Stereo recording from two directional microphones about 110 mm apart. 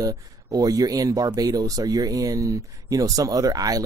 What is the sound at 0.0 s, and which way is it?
Speech, 35° right (ahead or behind).